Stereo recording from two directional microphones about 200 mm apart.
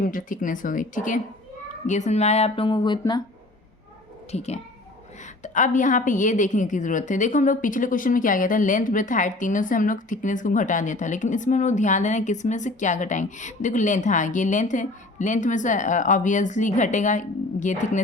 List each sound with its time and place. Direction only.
0.0 s a woman's voice: 45° left (ahead or behind); by 3.2 s 20° left (ahead or behind)
4.3 s a woman's voice: 35° left (ahead or behind)